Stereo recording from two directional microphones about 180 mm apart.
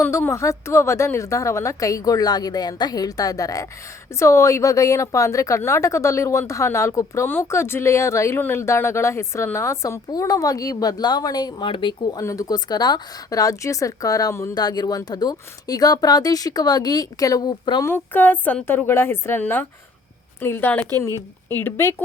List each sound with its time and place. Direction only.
0.0 s a woman's voice: 15° left (ahead or behind)
17.9 s a woman's voice: 10° left (ahead or behind)